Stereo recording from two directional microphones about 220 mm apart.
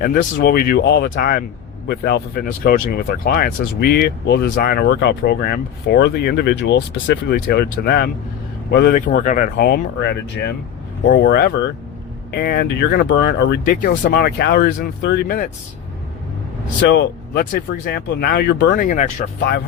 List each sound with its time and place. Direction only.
0.0 s speech: 40° left (ahead or behind)
16.9 s speech: 45° left (ahead or behind)